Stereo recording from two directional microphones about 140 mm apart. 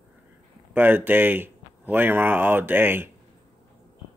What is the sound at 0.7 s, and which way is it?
Speech, 15° right (ahead or behind).